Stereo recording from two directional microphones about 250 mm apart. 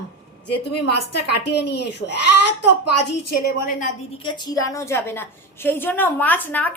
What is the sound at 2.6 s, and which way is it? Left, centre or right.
Speech, left.